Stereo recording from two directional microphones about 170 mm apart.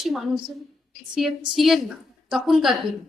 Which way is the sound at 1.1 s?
Centre (ahead or behind).